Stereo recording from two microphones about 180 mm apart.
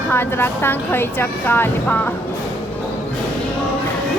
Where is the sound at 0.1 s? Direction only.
10° left (ahead or behind).